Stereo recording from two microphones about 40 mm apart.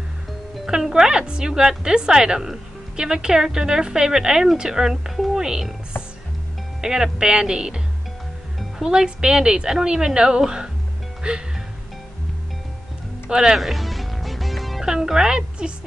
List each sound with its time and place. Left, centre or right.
0.7 s a woman's voice: centre
5.1 s music: centre
5.4 s speech: centre
6.8 s a woman's voice: centre
8.8 s a woman's voice: right
13.3 s a woman's voice: centre
13.6 s music: centre
14.8 s a woman's voice: centre